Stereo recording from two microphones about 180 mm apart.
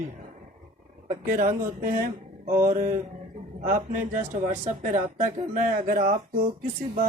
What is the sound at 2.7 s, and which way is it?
Mantra, 40° right (ahead or behind).